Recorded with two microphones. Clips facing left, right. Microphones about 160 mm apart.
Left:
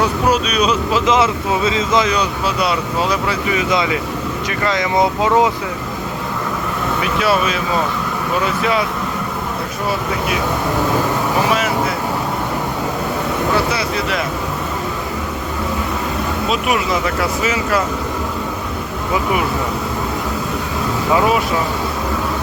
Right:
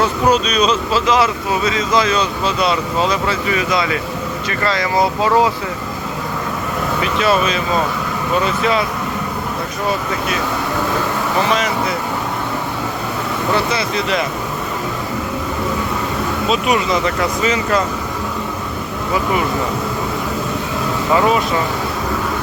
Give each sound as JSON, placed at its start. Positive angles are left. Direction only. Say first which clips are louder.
{"t": 0.0, "sound": "speech", "louder": "right 1 dB", "side_deg": 10}
{"t": 7.0, "sound": "speech", "louder": "right 1 dB", "side_deg": 10}
{"t": 11.4, "sound": "vehicle", "louder": "even", "side_deg": 10}
{"t": 13.5, "sound": "speech", "louder": "right 2 dB", "side_deg": 5}
{"t": 16.5, "sound": "speech", "louder": "right 2 dB", "side_deg": 5}